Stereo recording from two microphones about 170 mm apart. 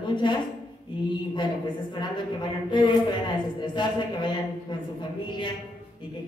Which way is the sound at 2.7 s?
25° left (ahead or behind).